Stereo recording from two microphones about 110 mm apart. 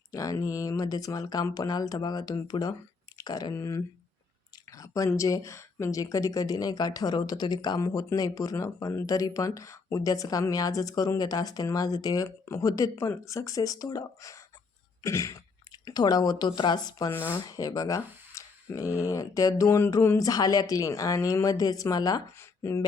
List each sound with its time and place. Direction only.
0.1 s speech: 30° left (ahead or behind)
3.5 s speech: 25° left (ahead or behind)
17.1 s speech: 20° left (ahead or behind)
17.4 s speech: 35° left (ahead or behind)
22.4 s speech: 25° left (ahead or behind)